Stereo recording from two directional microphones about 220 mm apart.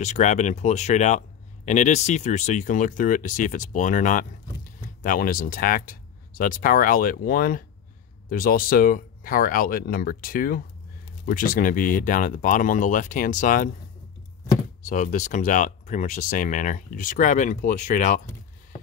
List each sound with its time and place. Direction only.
0.0 s speech: 30° left (ahead or behind)